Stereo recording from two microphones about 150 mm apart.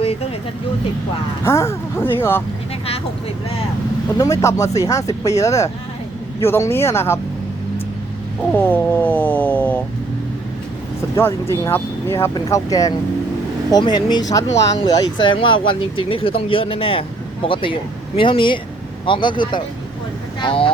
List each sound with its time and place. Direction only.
1.5 s speech: 20° left (ahead or behind)
4.2 s speech: 20° left (ahead or behind)
8.5 s speech: 10° left (ahead or behind)
11.2 s speech: 15° left (ahead or behind)
14.9 s speech: 35° left (ahead or behind)